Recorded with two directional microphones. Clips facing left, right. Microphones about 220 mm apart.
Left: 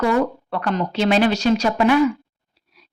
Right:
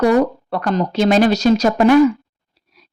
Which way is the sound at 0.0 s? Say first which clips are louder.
Right 5 dB; 40° right (ahead or behind).